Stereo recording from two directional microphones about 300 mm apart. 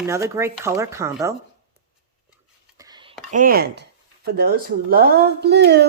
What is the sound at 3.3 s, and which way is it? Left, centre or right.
Speech, right.